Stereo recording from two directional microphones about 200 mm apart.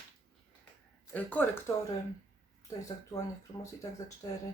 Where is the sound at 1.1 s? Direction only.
10° left (ahead or behind).